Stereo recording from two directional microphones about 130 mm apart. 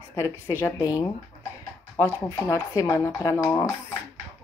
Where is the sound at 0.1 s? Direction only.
20° left (ahead or behind).